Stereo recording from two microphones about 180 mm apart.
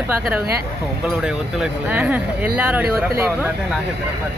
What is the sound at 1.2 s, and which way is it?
Speech, 5° right (ahead or behind).